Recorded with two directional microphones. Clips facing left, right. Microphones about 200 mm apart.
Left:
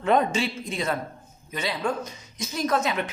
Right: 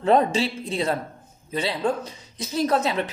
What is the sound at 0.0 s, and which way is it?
Speech, 35° right (ahead or behind).